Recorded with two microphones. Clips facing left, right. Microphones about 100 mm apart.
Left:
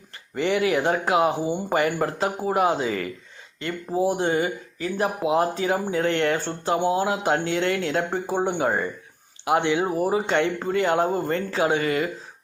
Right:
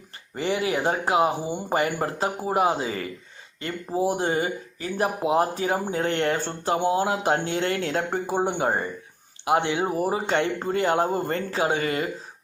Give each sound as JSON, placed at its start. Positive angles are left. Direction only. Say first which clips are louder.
{"t": 0.3, "sound": "speech", "louder": "left 3 dB", "side_deg": -30}
{"t": 3.9, "sound": "speech", "louder": "left 1 dB", "side_deg": -15}
{"t": 4.2, "sound": "speech", "louder": "left 2 dB", "side_deg": -35}
{"t": 6.7, "sound": "speech", "louder": "left 1 dB", "side_deg": -20}
{"t": 7.0, "sound": "speech", "louder": "even", "side_deg": -40}
{"t": 8.3, "sound": "speech", "louder": "even", "side_deg": -20}
{"t": 8.6, "sound": "speech", "louder": "left 1 dB", "side_deg": -35}